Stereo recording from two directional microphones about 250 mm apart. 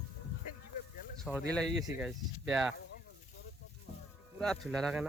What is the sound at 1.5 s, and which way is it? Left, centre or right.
Speech, centre.